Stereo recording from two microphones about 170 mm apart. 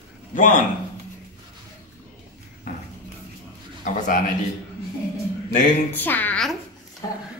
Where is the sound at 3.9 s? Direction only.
50° left (ahead or behind).